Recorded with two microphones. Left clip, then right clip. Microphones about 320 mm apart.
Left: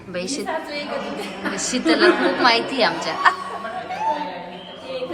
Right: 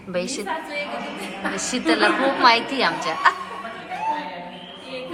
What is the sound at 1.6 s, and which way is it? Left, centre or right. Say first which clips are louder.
A woman's voice: left 2 dB; centre.